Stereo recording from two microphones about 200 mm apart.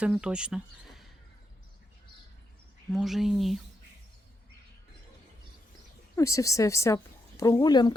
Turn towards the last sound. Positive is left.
turn(degrees=20)  # may be behind; listen again after turning